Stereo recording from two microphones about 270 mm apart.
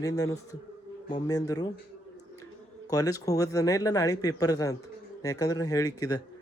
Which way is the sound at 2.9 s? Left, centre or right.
Centre.